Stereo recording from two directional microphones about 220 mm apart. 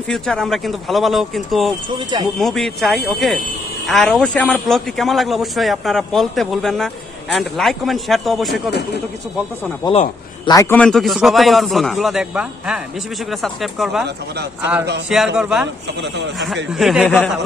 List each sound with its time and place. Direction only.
0.1 s a man's voice: centre (ahead or behind)
2.0 s speech: 20° right (ahead or behind)
2.3 s a man's voice: centre (ahead or behind)
8.6 s speech: 50° left (ahead or behind)
10.4 s a man's voice: 15° left (ahead or behind); by 14.0 s centre (ahead or behind)
14.0 s speech: 50° right (ahead or behind)
15.0 s a man's voice: centre (ahead or behind)
16.7 s a man's voice: centre (ahead or behind)